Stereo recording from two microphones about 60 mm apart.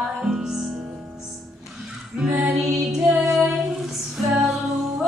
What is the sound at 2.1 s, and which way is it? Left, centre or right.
Female singing, centre.